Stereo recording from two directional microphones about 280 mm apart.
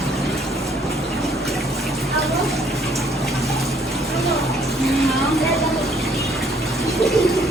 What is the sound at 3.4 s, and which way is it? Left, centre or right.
Bathtub, centre.